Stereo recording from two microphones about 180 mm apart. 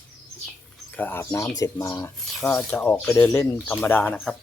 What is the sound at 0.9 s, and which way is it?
Speech, 10° left (ahead or behind).